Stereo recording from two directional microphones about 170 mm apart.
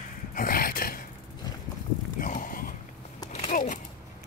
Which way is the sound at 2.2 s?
50° left (ahead or behind).